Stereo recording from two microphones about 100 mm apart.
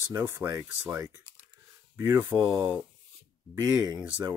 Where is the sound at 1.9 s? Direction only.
20° right (ahead or behind).